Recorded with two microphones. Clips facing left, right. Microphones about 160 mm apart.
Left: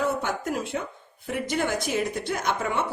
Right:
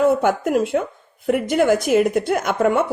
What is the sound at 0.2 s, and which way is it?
Speech, 55° right (ahead or behind).